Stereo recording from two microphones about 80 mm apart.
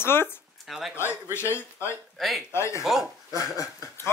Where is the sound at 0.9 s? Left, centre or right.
Left.